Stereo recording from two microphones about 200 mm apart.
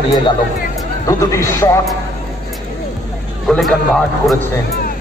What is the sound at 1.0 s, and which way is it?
Speech, 15° left (ahead or behind).